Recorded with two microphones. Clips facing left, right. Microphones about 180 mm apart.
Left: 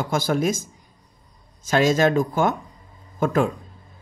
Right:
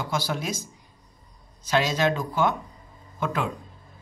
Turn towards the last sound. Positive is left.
turn(degrees=45)  # may be behind; listen again after turning